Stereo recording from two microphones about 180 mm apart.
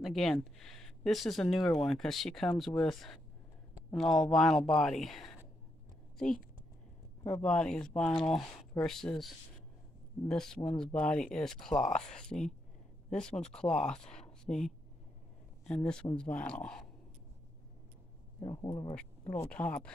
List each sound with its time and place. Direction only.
0.0 s speech: centre (ahead or behind)
7.4 s speech: 5° left (ahead or behind)
18.4 s speech: 20° left (ahead or behind)
19.5 s speech: 5° left (ahead or behind)